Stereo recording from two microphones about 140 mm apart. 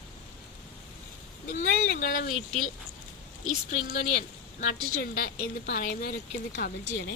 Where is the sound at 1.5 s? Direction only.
85° left.